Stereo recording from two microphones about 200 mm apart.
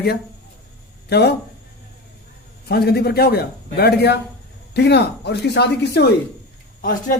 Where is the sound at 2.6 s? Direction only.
55° left (ahead or behind).